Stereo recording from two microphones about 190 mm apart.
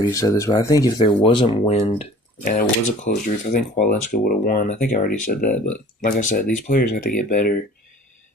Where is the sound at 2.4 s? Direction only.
45° left (ahead or behind).